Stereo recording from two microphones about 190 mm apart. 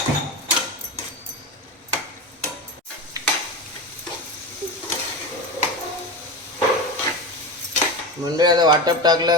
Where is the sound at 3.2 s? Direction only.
20° right (ahead or behind).